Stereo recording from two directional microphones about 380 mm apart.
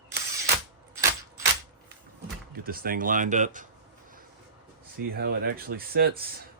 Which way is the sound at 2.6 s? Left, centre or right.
Right.